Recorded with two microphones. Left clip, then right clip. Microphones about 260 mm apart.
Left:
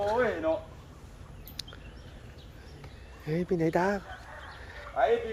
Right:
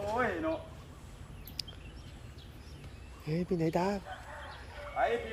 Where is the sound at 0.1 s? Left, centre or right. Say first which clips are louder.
Left 1 dB; left.